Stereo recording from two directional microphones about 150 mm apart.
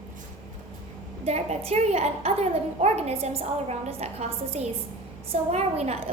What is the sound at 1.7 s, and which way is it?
A woman's voice, 45° right (ahead or behind).